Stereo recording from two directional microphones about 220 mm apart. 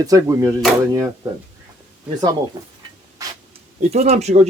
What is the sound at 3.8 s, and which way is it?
Speech, 30° right (ahead or behind).